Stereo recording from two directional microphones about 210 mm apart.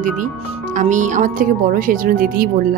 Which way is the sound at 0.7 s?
35° right (ahead or behind).